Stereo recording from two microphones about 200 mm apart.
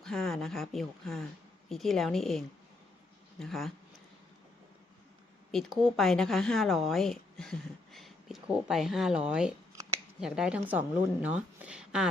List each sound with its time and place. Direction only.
0.0 s speech: centre (ahead or behind)
5.5 s speech: centre (ahead or behind)